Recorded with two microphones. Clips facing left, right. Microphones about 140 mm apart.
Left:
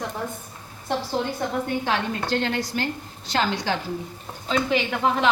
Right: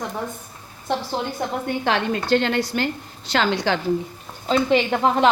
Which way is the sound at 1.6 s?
90° right.